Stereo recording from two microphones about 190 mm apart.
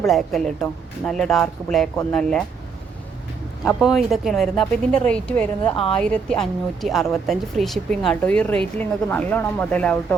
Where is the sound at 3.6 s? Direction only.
Centre (ahead or behind).